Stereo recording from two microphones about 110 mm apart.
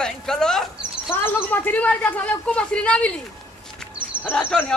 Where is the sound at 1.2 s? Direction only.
15° left (ahead or behind).